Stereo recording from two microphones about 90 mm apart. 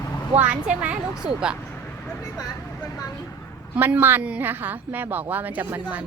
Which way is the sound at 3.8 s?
25° right (ahead or behind).